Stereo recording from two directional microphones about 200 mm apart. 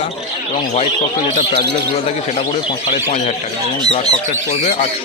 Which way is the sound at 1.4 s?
30° left (ahead or behind).